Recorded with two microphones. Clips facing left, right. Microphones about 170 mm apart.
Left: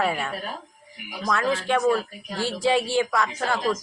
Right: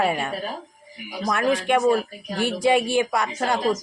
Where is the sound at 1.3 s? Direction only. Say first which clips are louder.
Right 3 dB; 15° right (ahead or behind).